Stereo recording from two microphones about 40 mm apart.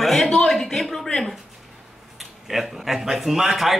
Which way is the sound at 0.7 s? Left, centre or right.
Centre.